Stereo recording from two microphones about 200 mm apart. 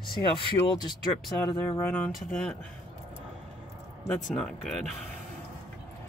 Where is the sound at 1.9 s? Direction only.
5° left (ahead or behind).